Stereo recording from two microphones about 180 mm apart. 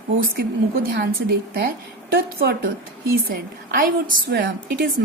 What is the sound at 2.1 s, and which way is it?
A woman's voice, 60° right (ahead or behind).